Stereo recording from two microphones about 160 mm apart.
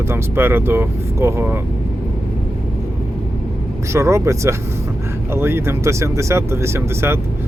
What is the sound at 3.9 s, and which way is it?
Speech, 20° right (ahead or behind).